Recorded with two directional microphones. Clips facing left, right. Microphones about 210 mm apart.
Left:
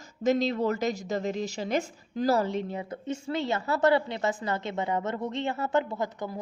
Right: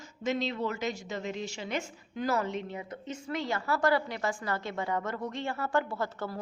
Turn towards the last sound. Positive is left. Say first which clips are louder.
# left 2 dB
turn(degrees=15)  # may be behind; listen again after turning